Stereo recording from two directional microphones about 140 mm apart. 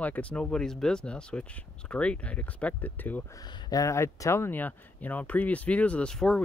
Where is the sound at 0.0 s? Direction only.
10° left (ahead or behind).